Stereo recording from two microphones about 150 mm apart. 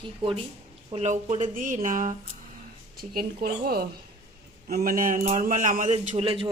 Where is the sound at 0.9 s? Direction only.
50° right (ahead or behind).